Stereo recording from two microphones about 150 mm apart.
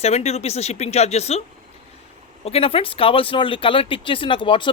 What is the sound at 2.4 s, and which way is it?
Speech, 40° left (ahead or behind).